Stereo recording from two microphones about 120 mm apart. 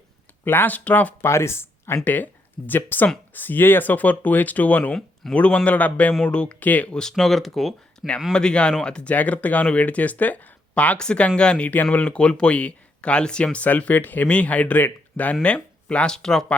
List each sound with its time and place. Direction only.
0.4 s speech: 15° left (ahead or behind)